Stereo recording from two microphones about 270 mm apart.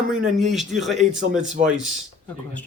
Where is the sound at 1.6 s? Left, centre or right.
Right.